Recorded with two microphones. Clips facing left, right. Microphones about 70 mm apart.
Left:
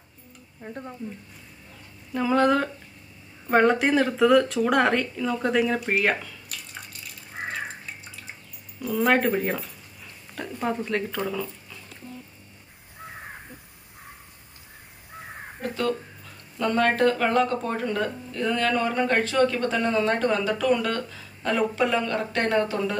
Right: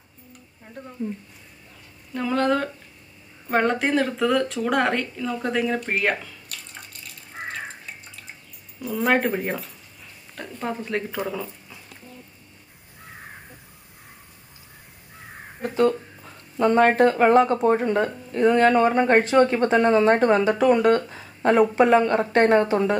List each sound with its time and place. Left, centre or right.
2.1 s speech: centre
8.8 s speech: centre
15.6 s a sound: right
16.5 s speech: right